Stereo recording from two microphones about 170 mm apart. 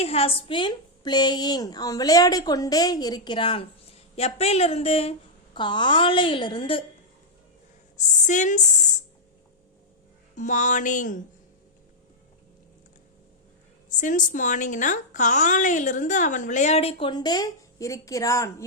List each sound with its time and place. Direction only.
0.0 s a woman's voice: 35° left (ahead or behind)
7.9 s a woman's voice: 45° left (ahead or behind)
10.3 s a woman's voice: 45° left (ahead or behind)
14.0 s a woman's voice: 50° left (ahead or behind); by 18.5 s 20° left (ahead or behind)